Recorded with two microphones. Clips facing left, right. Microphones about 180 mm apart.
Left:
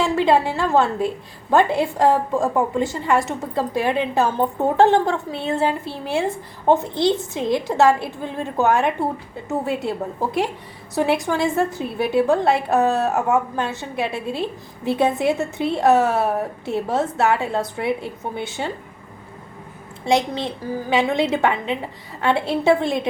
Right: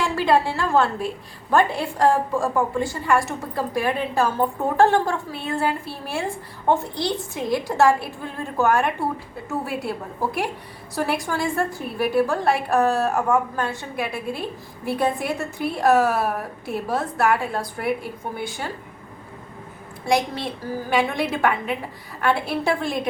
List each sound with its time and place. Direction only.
0.0 s a woman's voice: 20° left (ahead or behind)
20.1 s a woman's voice: 20° left (ahead or behind)